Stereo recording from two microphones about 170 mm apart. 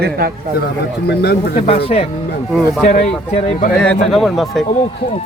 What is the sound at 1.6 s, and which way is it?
Speech, 35° left (ahead or behind).